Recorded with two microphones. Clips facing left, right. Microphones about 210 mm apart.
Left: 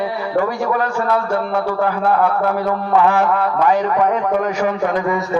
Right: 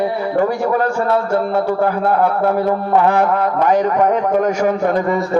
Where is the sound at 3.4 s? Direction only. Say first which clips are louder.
Right 2 dB; 45° right (ahead or behind).